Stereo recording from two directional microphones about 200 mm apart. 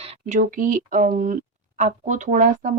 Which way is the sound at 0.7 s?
40° right (ahead or behind).